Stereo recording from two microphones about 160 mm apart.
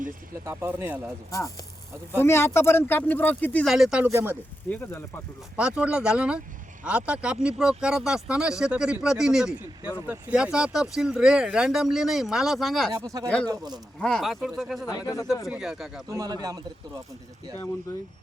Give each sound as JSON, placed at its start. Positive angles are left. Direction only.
{"t": 0.4, "sound": "speech", "side_deg": -15}
{"t": 1.3, "sound": "speech", "side_deg": 20}
{"t": 3.7, "sound": "speech", "side_deg": 0}
{"t": 4.7, "sound": "speech", "side_deg": 15}
{"t": 5.5, "sound": "speech", "side_deg": -5}
{"t": 12.9, "sound": "a man's voice", "side_deg": -20}
{"t": 13.2, "sound": "speech", "side_deg": 5}
{"t": 14.8, "sound": "speech", "side_deg": 20}
{"t": 15.4, "sound": "speech", "side_deg": -5}
{"t": 16.1, "sound": "a man's voice", "side_deg": -25}